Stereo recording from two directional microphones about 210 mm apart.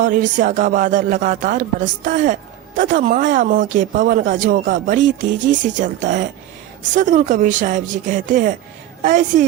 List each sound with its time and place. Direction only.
0.0 s speech: 40° right (ahead or behind)